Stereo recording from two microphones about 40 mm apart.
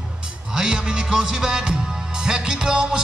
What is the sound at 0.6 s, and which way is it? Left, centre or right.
Music, centre.